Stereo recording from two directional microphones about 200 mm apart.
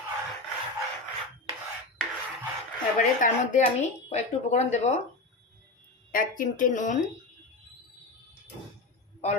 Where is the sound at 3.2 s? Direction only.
40° left (ahead or behind).